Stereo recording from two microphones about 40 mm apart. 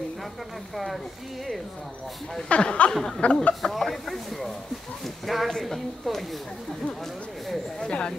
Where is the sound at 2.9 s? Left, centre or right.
Centre.